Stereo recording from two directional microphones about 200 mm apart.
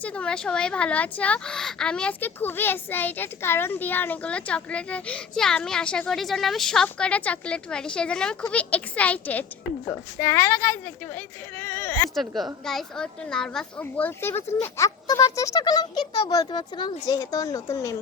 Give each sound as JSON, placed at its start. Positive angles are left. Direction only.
{"t": 0.0, "sound": "speech", "side_deg": 5}
{"t": 12.1, "sound": "a woman's voice", "side_deg": 0}